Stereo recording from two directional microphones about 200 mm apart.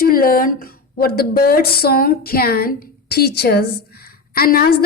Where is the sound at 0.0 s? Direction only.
45° left (ahead or behind).